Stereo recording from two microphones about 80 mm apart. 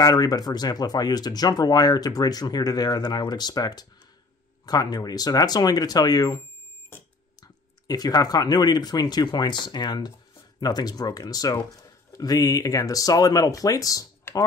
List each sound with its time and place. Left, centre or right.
0.0 s speech: left